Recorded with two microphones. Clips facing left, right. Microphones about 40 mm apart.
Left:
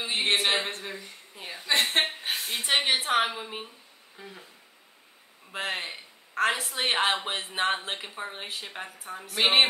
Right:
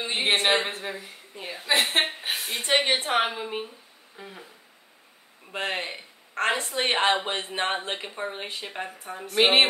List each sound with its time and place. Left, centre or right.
0.0 s a woman's voice: centre
5.5 s a woman's voice: centre